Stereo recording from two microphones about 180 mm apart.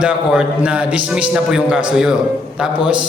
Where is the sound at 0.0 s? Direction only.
5° right (ahead or behind).